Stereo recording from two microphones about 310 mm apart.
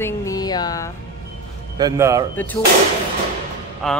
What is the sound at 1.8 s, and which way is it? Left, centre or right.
Speech, centre.